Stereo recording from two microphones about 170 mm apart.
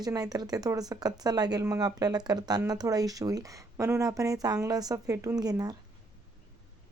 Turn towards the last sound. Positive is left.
turn(degrees=-20)  # may be behind; listen again after turning